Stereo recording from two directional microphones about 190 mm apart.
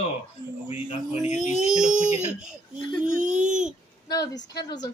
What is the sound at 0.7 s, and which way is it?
Speech, 30° left (ahead or behind).